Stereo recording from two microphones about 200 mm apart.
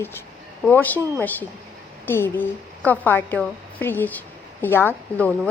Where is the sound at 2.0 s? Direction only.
10° left (ahead or behind).